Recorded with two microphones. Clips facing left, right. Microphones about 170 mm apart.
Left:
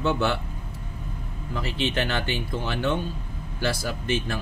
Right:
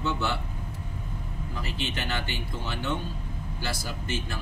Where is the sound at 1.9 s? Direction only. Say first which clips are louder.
Left 6 dB; 65° left (ahead or behind).